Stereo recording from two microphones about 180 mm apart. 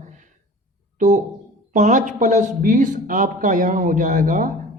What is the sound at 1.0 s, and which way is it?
Speech, 45° right (ahead or behind).